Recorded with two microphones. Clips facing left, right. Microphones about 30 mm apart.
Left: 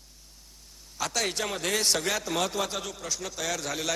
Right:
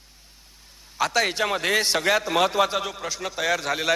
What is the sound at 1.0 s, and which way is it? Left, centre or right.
A man's voice, right.